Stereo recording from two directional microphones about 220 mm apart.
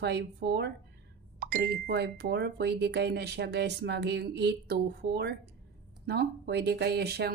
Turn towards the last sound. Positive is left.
turn(degrees=-45)  # may be behind; listen again after turning